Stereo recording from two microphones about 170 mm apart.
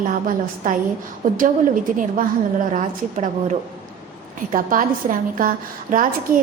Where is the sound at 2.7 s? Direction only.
45° right (ahead or behind).